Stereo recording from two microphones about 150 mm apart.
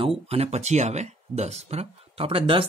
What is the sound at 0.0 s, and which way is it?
Speech, 40° right (ahead or behind).